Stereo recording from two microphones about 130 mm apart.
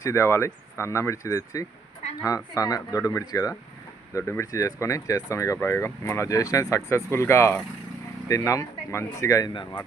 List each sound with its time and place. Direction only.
0.0 s speech: 20° left (ahead or behind)